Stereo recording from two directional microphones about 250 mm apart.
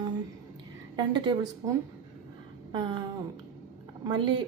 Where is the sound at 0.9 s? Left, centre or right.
Centre.